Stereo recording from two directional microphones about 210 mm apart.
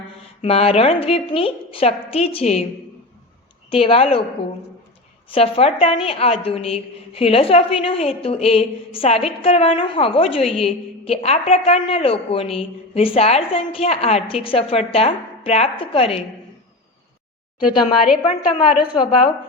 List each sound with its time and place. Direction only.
0.4 s a woman's voice: 30° left (ahead or behind)
3.7 s a woman's voice: 25° left (ahead or behind)
5.3 s a woman's voice: 30° left (ahead or behind)
18.2 s a woman's voice: 25° left (ahead or behind)